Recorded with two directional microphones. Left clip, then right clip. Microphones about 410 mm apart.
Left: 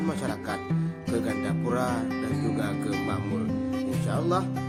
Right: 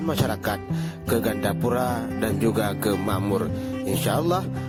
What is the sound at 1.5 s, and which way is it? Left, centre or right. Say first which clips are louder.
Speech: right 4 dB; right.